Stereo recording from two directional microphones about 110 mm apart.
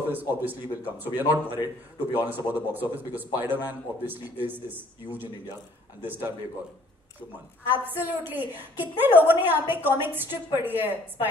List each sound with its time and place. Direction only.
0.1 s a woman's voice: 15° right (ahead or behind)
7.7 s a woman's voice: 15° right (ahead or behind)